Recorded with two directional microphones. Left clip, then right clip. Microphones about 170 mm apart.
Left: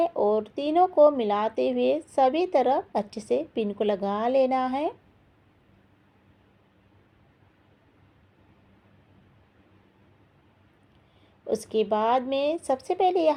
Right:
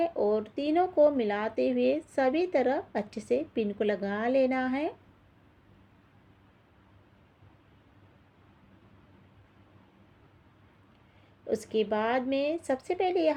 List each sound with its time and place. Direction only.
0.0 s speech: 25° left (ahead or behind)
11.4 s speech: 25° left (ahead or behind)